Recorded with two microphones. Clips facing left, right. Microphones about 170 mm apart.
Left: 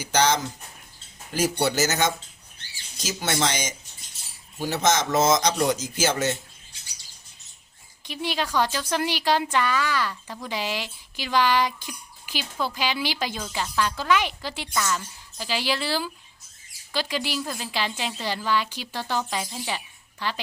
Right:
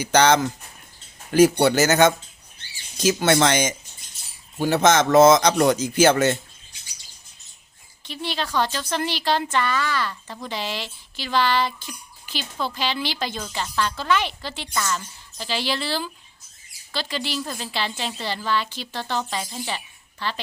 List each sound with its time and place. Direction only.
0.0 s a man's voice: 65° right (ahead or behind)
8.0 s a woman's voice: 10° left (ahead or behind)